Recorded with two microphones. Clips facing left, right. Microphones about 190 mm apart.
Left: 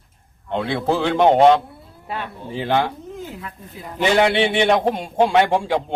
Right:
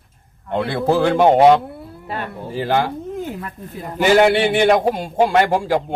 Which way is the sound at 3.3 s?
50° right (ahead or behind).